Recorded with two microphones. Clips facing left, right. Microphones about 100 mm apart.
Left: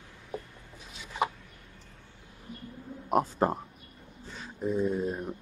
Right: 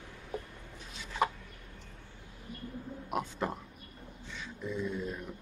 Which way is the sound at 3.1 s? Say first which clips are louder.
Left 9 dB; 40° left (ahead or behind).